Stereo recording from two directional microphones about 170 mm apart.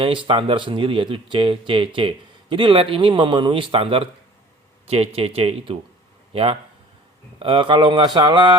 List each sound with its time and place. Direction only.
0.0 s speech: 30° right (ahead or behind)